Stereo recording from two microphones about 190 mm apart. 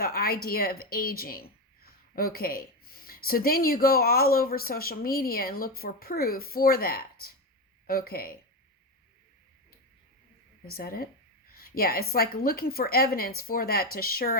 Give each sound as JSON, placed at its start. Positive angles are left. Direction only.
{"t": 0.0, "sound": "speech", "side_deg": 50}
{"t": 10.7, "sound": "speech", "side_deg": 50}